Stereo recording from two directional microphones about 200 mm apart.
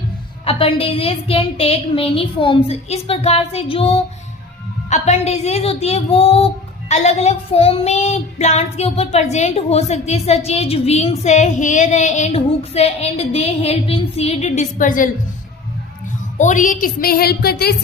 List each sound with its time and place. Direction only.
0.4 s a woman's voice: 30° left (ahead or behind)
16.4 s a woman's voice: 40° left (ahead or behind)